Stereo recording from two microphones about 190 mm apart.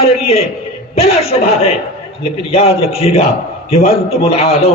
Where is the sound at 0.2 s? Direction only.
30° left (ahead or behind).